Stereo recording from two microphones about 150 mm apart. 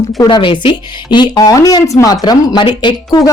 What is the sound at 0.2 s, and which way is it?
Speech, 30° left (ahead or behind).